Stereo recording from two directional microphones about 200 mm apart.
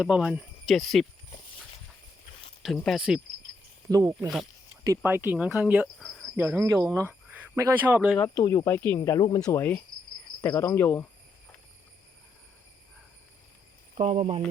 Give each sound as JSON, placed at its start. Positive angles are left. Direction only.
{"t": 0.0, "sound": "speech", "side_deg": -5}
{"t": 2.6, "sound": "speech", "side_deg": 0}
{"t": 3.8, "sound": "speech", "side_deg": -20}
{"t": 8.2, "sound": "speech", "side_deg": 15}
{"t": 13.9, "sound": "speech", "side_deg": -35}